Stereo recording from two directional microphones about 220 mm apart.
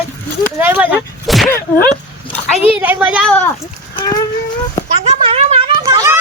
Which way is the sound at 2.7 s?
10° right (ahead or behind).